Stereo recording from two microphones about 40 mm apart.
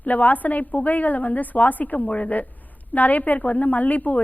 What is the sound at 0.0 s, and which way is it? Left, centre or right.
A woman's voice, left.